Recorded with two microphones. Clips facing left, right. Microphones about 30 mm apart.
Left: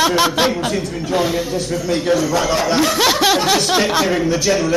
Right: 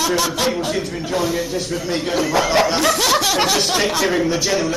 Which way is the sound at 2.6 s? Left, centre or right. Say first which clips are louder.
Left 2 dB; centre.